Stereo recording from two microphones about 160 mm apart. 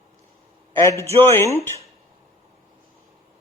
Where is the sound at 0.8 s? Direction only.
15° left (ahead or behind).